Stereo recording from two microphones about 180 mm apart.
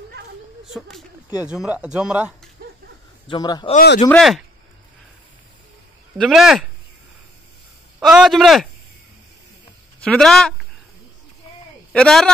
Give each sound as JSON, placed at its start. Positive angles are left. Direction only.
{"t": 0.7, "sound": "speech", "side_deg": 0}
{"t": 3.3, "sound": "speech", "side_deg": 25}
{"t": 4.1, "sound": "speech", "side_deg": 0}
{"t": 6.1, "sound": "speech", "side_deg": 0}
{"t": 8.0, "sound": "a man's voice", "side_deg": -5}
{"t": 10.0, "sound": "speech", "side_deg": 5}
{"t": 11.9, "sound": "speech", "side_deg": 5}